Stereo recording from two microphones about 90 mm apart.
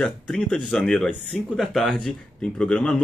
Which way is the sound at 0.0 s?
5° left (ahead or behind).